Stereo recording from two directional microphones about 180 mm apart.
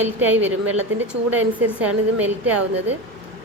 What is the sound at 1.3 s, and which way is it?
Speech, 10° right (ahead or behind).